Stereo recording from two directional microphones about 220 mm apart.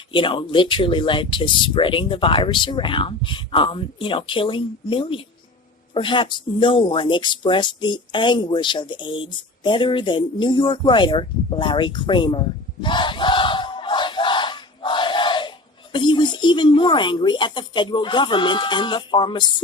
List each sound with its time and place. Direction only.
0.1 s speech: 20° left (ahead or behind)
12.8 s battle cry: 20° left (ahead or behind)